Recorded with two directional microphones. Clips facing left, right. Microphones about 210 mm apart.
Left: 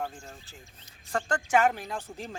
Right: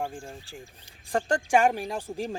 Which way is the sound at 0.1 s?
30° right (ahead or behind).